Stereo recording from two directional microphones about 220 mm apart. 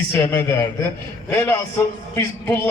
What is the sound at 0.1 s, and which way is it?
A man's voice, 10° left (ahead or behind).